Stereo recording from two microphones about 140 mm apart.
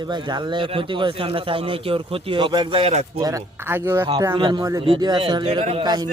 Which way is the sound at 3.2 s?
25° right (ahead or behind).